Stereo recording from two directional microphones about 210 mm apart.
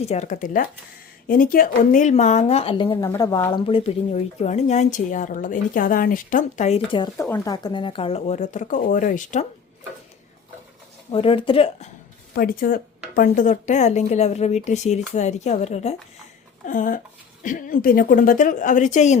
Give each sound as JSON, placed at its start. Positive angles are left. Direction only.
{"t": 0.0, "sound": "speech", "side_deg": 30}
{"t": 6.9, "sound": "speech", "side_deg": 15}
{"t": 11.1, "sound": "speech", "side_deg": 25}
{"t": 12.3, "sound": "speech", "side_deg": 45}